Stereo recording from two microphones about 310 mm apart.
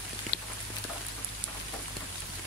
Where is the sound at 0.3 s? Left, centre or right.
Left.